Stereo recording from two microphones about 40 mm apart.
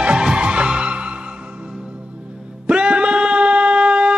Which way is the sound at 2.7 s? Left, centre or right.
Right.